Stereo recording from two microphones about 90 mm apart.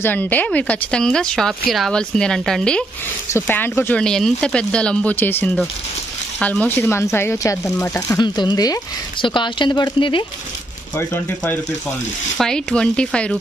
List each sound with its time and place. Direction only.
0.0 s speech: 20° left (ahead or behind)
3.3 s speech: 25° left (ahead or behind)
4.0 s speech: 5° left (ahead or behind)
5.1 s speech: 20° left (ahead or behind)
6.8 s speech: 30° left (ahead or behind)
8.2 s speech: 55° left (ahead or behind)
9.2 s speech: 65° left (ahead or behind)
12.4 s speech: 10° left (ahead or behind)